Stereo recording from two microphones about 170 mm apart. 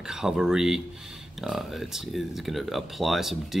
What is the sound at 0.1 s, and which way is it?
Speech, 5° right (ahead or behind).